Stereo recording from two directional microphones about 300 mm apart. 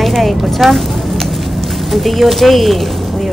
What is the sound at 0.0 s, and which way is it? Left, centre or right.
Speech, centre.